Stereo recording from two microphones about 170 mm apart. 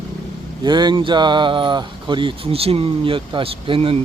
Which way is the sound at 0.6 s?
25° right (ahead or behind).